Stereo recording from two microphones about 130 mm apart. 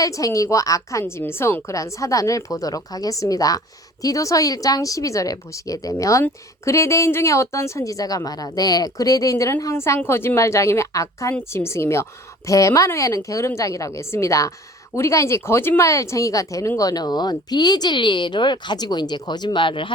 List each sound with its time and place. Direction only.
0.0 s a woman's voice: 25° left (ahead or behind)